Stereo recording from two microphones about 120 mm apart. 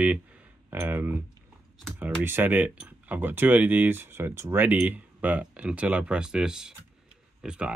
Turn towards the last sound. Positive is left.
turn(degrees=-5)  # may be behind; listen again after turning